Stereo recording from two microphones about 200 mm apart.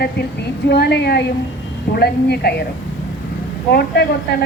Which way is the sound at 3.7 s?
55° left (ahead or behind).